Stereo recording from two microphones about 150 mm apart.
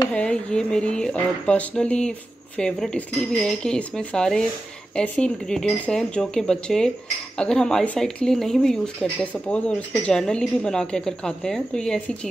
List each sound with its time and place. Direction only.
0.1 s speech: 5° left (ahead or behind)